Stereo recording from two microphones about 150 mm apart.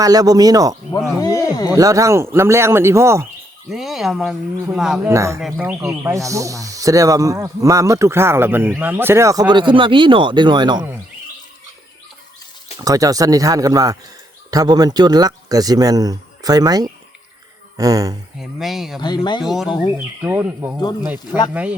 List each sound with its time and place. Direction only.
0.0 s speech: 25° right (ahead or behind)
1.2 s speech: 25° left (ahead or behind)
1.7 s speech: 20° right (ahead or behind)
3.7 s speech: centre (ahead or behind)
5.0 s speech: 20° right (ahead or behind)
5.4 s speech: 5° right (ahead or behind)
5.7 s speech: 15° right (ahead or behind)
12.8 s speech: 25° right (ahead or behind)
18.3 s speech: centre (ahead or behind)
18.9 s speech: 30° left (ahead or behind)
19.4 s speech: centre (ahead or behind)
19.6 s speech: 30° left (ahead or behind)
20.2 s speech: 10° right (ahead or behind)